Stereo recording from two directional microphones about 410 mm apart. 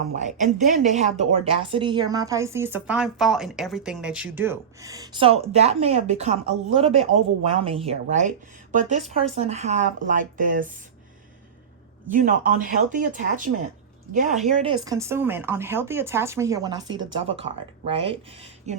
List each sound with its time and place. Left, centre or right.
0.1 s speech: centre
12.1 s speech: centre